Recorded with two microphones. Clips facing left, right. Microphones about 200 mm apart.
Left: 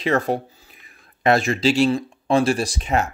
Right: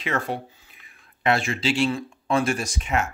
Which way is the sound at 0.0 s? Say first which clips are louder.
Left 7 dB; 40° left (ahead or behind).